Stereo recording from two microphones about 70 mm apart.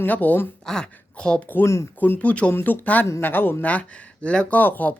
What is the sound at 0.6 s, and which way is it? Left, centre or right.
Speech, centre.